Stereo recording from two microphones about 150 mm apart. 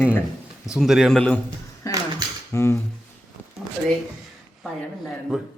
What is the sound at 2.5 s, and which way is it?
Speech, 15° left (ahead or behind).